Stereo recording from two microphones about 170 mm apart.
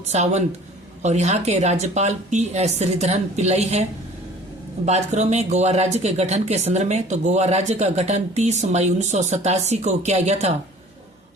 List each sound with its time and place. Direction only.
0.1 s speech: 40° right (ahead or behind)
4.9 s speech: 40° right (ahead or behind)